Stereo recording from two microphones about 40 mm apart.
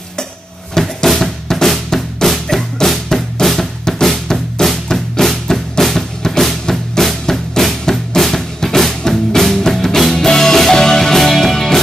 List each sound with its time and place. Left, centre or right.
0.7 s music: centre